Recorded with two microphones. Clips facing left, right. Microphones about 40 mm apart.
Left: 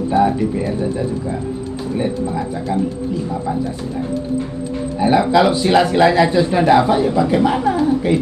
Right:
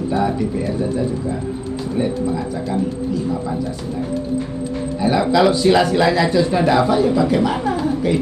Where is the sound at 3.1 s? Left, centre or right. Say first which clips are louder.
Even; left.